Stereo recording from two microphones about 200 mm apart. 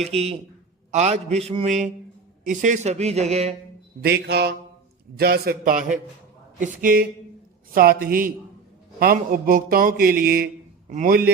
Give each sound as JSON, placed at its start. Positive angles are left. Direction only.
{"t": 0.1, "sound": "a man's voice", "side_deg": -30}
{"t": 4.0, "sound": "mantra", "side_deg": -55}
{"t": 5.1, "sound": "a man's voice", "side_deg": -50}